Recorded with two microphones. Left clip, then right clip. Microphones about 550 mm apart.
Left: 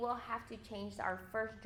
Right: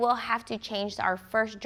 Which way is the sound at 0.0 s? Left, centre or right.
Right.